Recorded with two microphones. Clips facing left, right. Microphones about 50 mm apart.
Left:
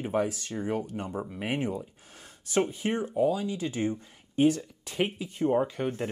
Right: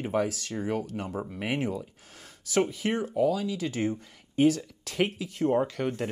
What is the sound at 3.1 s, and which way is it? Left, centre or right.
Speech, right.